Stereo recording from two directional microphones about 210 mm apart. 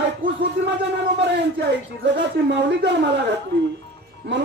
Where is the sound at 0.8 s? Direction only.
55° right (ahead or behind).